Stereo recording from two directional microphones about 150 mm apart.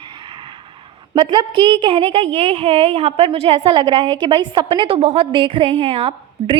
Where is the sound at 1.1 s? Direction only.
35° right (ahead or behind).